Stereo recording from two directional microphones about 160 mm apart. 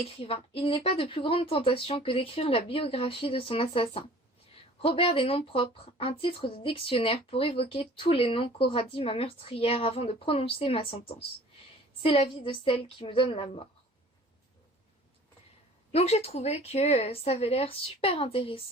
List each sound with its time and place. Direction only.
0.0 s speech: 35° left (ahead or behind)
15.9 s speech: 40° left (ahead or behind)